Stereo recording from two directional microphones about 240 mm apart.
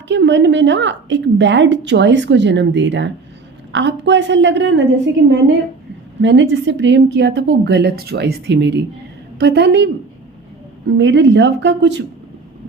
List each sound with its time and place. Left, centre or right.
0.1 s a woman's voice: right